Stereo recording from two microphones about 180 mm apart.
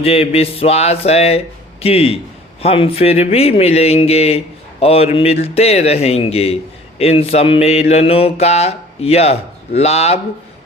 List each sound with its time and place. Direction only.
0.0 s mantra: 35° left (ahead or behind)